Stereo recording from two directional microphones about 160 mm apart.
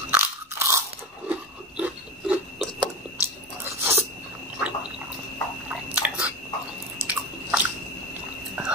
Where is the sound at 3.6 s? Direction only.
15° right (ahead or behind).